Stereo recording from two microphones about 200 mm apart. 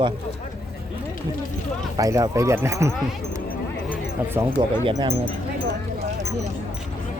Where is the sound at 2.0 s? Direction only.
15° right (ahead or behind).